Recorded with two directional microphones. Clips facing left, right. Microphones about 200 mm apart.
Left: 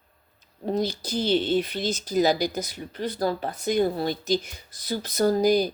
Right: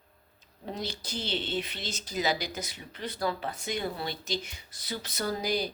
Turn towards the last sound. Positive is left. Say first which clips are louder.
# left 10 dB
turn(degrees=45)  # may be behind; listen again after turning